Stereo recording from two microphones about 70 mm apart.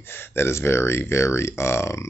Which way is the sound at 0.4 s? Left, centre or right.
Left.